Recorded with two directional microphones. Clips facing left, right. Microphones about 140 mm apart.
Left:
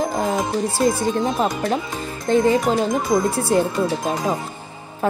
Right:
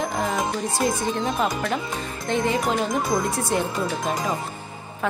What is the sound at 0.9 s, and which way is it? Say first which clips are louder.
A woman's voice: left 4 dB; 30° left (ahead or behind).